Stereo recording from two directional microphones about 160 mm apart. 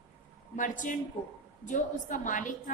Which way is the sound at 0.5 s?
55° left (ahead or behind).